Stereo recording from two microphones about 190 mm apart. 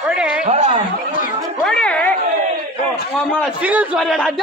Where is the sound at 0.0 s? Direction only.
5° right (ahead or behind).